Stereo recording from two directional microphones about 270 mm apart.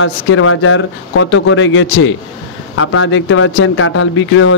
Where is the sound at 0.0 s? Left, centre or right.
Left.